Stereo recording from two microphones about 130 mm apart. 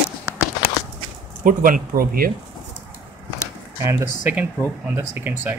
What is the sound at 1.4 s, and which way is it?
Speech, 90° right.